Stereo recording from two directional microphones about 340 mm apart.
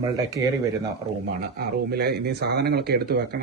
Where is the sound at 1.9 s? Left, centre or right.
Right.